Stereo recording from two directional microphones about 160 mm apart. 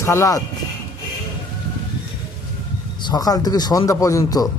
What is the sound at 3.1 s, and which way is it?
Speech, 25° left (ahead or behind).